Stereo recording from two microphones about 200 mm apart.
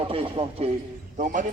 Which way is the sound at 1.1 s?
40° right (ahead or behind).